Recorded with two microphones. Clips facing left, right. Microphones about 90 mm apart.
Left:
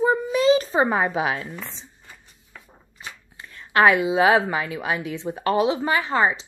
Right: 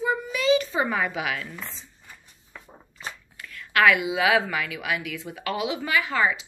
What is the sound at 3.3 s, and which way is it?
A woman's voice, 30° left (ahead or behind).